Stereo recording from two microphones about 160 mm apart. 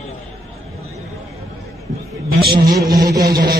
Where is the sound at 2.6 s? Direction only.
25° right (ahead or behind).